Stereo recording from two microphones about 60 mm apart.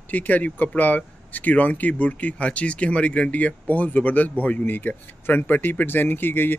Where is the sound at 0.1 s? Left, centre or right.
Left.